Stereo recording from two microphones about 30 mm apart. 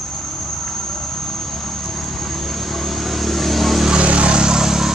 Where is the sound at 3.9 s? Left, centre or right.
Right.